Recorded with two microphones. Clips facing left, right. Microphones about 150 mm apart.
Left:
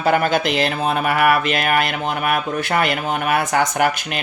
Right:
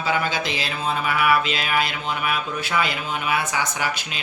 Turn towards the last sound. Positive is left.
turn(degrees=55)  # may be behind; listen again after turning